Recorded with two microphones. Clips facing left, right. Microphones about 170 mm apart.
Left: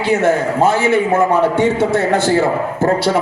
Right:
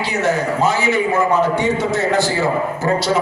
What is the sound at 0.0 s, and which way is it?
A man's voice, 55° left (ahead or behind).